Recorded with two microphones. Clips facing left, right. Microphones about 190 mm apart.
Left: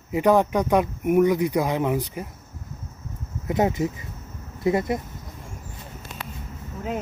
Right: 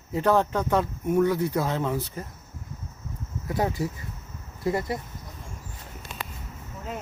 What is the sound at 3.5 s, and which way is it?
Speech, 20° left (ahead or behind).